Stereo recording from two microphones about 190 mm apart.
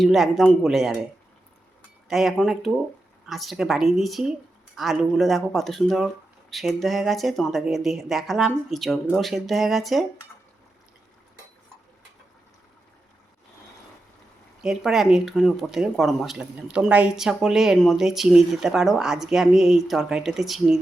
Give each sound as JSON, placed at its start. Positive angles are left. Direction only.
{"t": 0.0, "sound": "speech", "side_deg": 0}
{"t": 2.0, "sound": "speech", "side_deg": 0}
{"t": 14.6, "sound": "speech", "side_deg": 0}